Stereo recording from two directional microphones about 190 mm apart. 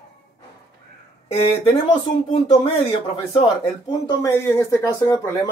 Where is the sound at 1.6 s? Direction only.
25° left (ahead or behind).